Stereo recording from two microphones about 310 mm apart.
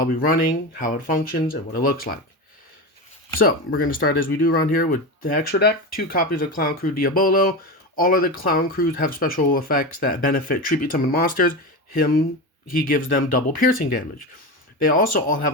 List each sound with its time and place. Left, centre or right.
0.0 s speech: left
3.4 s speech: left